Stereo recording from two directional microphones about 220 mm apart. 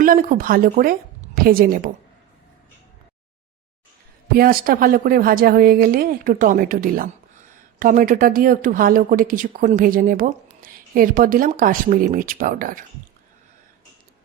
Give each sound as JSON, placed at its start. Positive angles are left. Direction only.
{"t": 0.0, "sound": "speech", "side_deg": -40}
{"t": 4.3, "sound": "speech", "side_deg": -40}